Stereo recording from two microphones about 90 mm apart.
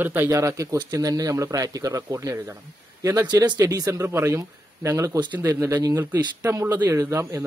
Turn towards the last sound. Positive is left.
turn(degrees=-35)  # may be behind; listen again after turning